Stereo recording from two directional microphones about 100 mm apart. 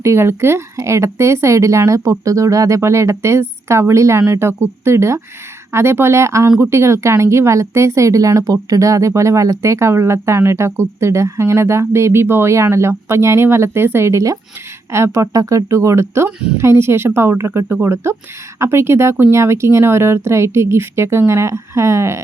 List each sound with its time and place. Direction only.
0.0 s speech: 25° right (ahead or behind)